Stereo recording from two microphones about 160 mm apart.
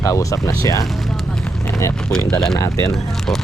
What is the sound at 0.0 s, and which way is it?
Speech, 20° left (ahead or behind).